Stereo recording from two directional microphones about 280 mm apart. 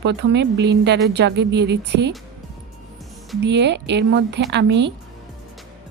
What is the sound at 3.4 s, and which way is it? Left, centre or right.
A woman's voice, right.